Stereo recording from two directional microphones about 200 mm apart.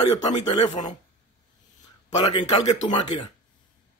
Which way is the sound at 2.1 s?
30° left (ahead or behind).